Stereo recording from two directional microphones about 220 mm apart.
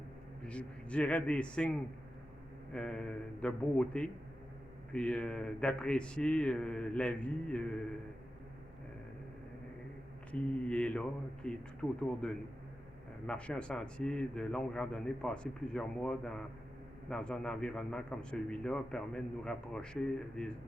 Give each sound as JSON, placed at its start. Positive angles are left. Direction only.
{"t": 0.4, "sound": "a man's voice", "side_deg": 5}
{"t": 2.7, "sound": "a man's voice", "side_deg": 5}
{"t": 10.3, "sound": "a man's voice", "side_deg": 5}